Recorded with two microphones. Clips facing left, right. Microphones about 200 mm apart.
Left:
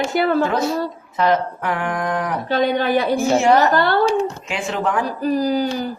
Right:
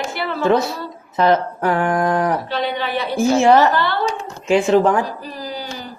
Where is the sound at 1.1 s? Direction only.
35° right (ahead or behind).